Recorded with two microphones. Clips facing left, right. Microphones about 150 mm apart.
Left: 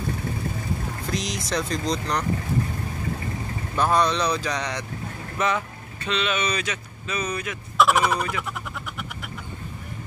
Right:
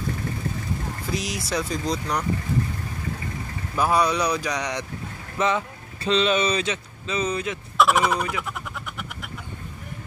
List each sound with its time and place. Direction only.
1.1 s speech: 5° right (ahead or behind)
3.7 s speech: 10° right (ahead or behind)
6.0 s speech: 35° right (ahead or behind)
7.7 s speech: centre (ahead or behind)